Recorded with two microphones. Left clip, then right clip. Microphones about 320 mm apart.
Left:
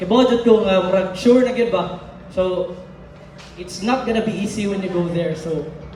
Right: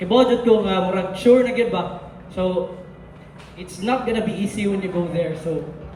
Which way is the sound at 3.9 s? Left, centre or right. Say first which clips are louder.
Left 2 dB; centre.